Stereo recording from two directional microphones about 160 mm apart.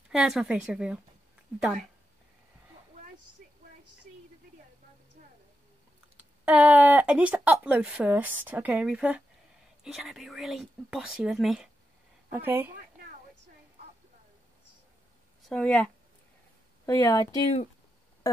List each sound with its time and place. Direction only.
0.1 s speech: 5° right (ahead or behind)
6.1 s speech: 10° right (ahead or behind)
12.3 s speech: 10° right (ahead or behind)
15.4 s speech: 5° left (ahead or behind)
16.8 s speech: 20° left (ahead or behind)
18.3 s a sound: 20° left (ahead or behind)